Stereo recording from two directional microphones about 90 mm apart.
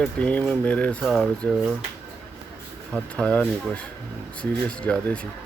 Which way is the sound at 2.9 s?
10° left (ahead or behind).